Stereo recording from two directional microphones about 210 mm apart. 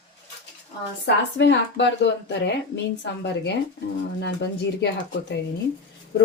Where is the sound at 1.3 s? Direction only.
55° left (ahead or behind).